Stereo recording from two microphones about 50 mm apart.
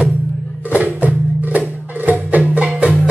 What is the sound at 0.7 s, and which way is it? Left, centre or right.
Music, right.